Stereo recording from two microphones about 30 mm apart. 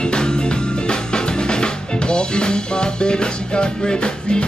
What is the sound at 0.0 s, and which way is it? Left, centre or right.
Music, left.